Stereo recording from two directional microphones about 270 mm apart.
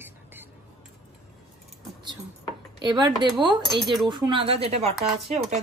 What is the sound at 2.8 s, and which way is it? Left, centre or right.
Speech, centre.